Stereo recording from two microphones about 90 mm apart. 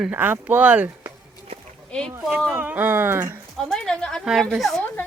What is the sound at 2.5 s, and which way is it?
Speech, 20° right (ahead or behind).